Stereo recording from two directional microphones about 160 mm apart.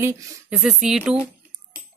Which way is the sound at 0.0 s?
15° right (ahead or behind).